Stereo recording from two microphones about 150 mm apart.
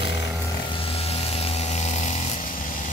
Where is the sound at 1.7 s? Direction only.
50° left (ahead or behind).